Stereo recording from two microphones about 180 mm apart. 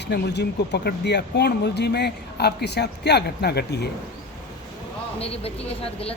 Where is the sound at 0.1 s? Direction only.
70° left (ahead or behind).